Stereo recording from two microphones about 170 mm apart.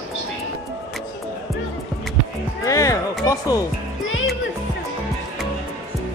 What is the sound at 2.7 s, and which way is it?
Music, 20° left (ahead or behind).